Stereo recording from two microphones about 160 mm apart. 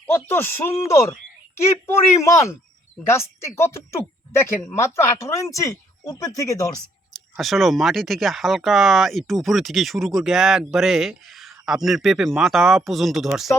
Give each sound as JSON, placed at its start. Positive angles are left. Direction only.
{"t": 0.1, "sound": "a woman's voice", "side_deg": 15}
{"t": 7.1, "sound": "speech", "side_deg": 0}